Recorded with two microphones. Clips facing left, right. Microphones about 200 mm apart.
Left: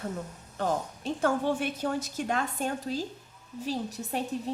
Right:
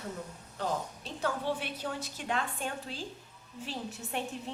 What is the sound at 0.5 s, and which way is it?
A woman's voice, 50° left (ahead or behind).